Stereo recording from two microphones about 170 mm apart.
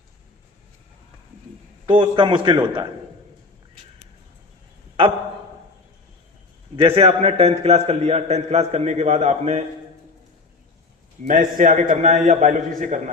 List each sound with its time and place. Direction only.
1.9 s a man's voice: 30° right (ahead or behind)
6.7 s a man's voice: 35° right (ahead or behind)
11.3 s a man's voice: 50° right (ahead or behind)